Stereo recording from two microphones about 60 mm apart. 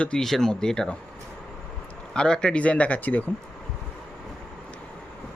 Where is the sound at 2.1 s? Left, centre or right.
Centre; by 3.2 s left.